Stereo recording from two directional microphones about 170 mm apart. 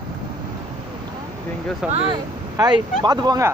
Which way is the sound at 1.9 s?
40° right (ahead or behind).